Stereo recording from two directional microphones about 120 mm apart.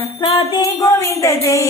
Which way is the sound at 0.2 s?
45° left (ahead or behind).